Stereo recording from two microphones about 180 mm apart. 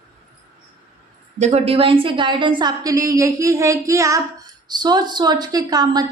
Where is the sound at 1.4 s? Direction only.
30° right (ahead or behind).